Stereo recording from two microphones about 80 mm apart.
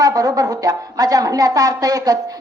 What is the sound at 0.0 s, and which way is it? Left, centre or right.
Speech, right.